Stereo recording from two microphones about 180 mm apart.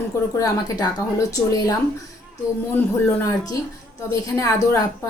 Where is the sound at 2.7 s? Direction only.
15° left (ahead or behind).